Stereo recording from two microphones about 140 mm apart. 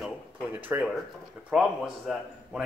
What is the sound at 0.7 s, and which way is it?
Speech, 15° right (ahead or behind).